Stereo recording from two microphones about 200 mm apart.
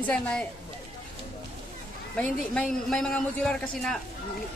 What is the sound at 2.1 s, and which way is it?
A man's voice, 5° left (ahead or behind).